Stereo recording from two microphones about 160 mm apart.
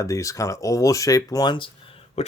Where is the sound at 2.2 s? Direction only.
40° left (ahead or behind).